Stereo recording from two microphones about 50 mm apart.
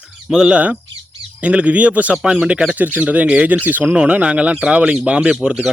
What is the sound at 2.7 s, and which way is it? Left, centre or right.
Speech, right.